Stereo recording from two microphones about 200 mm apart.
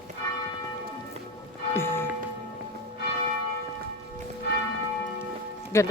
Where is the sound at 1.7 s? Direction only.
10° left (ahead or behind).